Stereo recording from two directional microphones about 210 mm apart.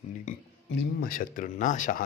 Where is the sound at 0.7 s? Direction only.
45° left (ahead or behind).